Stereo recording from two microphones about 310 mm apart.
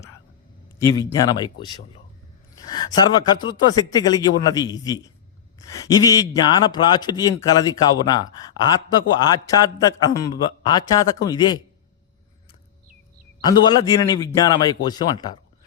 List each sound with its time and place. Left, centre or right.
0.8 s a man's voice: centre
13.4 s a man's voice: centre